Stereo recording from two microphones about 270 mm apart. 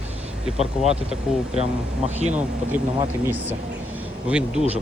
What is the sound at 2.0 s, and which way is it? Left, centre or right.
Speech, right.